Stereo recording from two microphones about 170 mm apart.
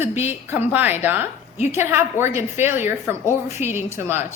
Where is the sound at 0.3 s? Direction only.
10° right (ahead or behind).